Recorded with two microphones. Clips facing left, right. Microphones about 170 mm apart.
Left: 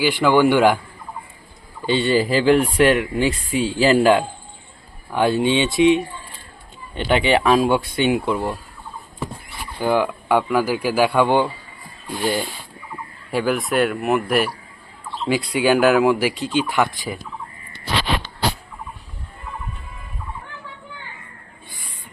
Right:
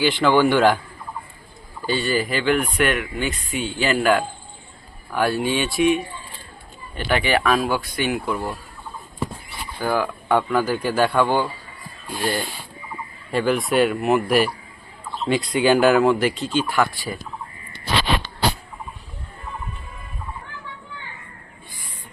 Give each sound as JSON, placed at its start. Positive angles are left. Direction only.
{"t": 0.0, "sound": "speech", "side_deg": 10}
{"t": 1.9, "sound": "speech", "side_deg": 25}
{"t": 9.8, "sound": "speech", "side_deg": 20}
{"t": 13.3, "sound": "speech", "side_deg": 5}